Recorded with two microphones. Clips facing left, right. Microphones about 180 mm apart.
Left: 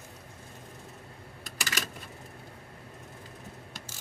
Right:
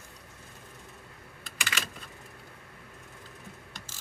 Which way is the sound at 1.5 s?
40° left (ahead or behind).